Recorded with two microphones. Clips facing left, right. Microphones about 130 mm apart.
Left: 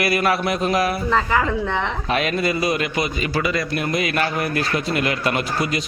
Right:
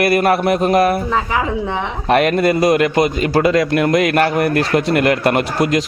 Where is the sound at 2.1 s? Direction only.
60° right (ahead or behind).